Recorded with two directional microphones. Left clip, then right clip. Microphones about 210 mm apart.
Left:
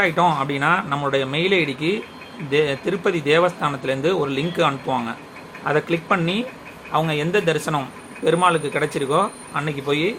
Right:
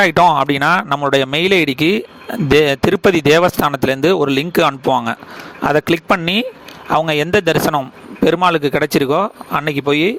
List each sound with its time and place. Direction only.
0.0 s speech: 55° right (ahead or behind)